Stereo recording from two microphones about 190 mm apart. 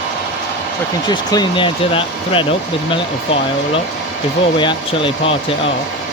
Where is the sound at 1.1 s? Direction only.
20° left (ahead or behind).